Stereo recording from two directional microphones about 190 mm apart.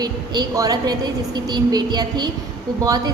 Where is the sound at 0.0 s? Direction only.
20° right (ahead or behind).